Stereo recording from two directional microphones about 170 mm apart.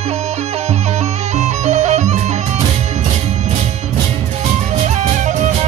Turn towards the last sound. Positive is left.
turn(degrees=-45)  # may be behind; listen again after turning